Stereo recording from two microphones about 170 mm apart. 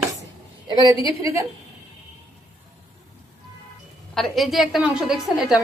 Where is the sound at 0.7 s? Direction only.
25° right (ahead or behind).